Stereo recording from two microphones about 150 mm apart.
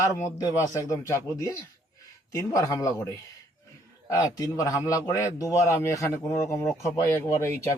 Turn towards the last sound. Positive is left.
turn(degrees=15)  # may be behind; listen again after turning